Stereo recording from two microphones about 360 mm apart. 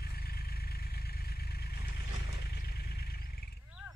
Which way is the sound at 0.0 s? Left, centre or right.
Left.